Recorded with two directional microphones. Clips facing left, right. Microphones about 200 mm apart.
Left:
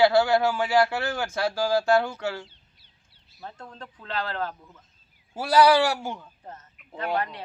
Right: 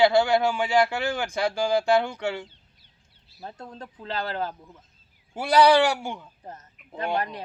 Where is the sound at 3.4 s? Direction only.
20° right (ahead or behind).